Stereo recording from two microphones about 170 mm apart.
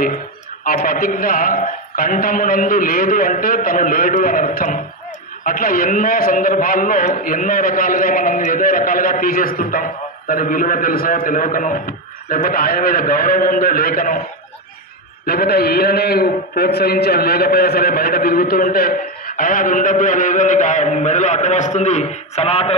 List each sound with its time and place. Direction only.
0.8 s a man's voice: 55° left (ahead or behind)
15.2 s a man's voice: 65° left (ahead or behind); by 22.8 s 35° left (ahead or behind)